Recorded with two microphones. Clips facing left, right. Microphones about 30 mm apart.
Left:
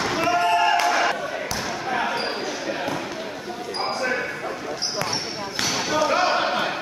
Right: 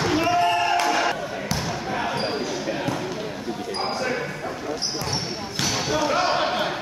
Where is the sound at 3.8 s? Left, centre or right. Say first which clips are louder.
Left 2 dB; centre.